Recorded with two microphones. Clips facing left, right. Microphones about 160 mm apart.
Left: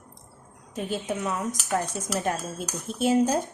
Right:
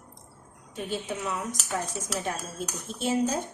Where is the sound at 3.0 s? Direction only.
55° left (ahead or behind).